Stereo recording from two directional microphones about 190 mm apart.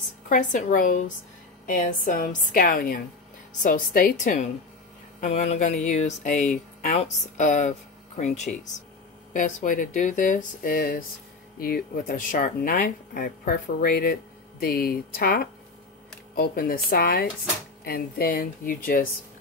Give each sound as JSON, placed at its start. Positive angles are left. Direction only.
{"t": 0.3, "sound": "speech", "side_deg": 45}